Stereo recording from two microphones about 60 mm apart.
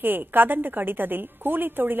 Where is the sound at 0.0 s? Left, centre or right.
Right.